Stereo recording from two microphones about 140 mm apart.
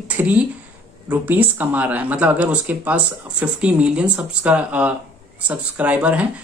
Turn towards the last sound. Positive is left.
turn(degrees=-10)  # may be behind; listen again after turning